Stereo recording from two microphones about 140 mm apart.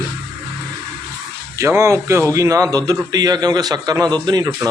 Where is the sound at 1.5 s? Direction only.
20° right (ahead or behind).